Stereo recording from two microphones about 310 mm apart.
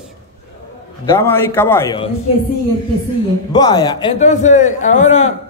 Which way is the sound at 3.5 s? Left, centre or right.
Centre.